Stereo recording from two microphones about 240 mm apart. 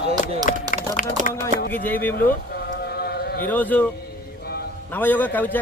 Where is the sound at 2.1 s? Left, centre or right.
Left.